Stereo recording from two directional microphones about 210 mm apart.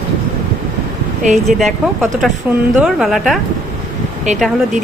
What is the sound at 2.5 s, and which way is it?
A woman's voice, centre (ahead or behind).